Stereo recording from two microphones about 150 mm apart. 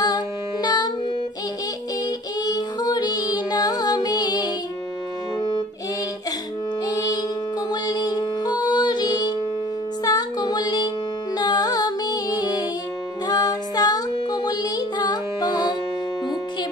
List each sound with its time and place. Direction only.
0.0 s music: 25° left (ahead or behind)
2.4 s music: 25° left (ahead or behind)
6.9 s music: 25° left (ahead or behind)